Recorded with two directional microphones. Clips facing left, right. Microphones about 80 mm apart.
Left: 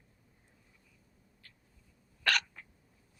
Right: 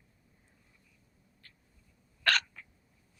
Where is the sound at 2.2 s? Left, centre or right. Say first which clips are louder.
Right 2 dB; centre.